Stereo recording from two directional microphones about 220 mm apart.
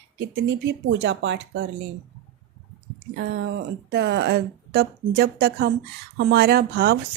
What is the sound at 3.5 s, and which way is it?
Speech, 50° right (ahead or behind).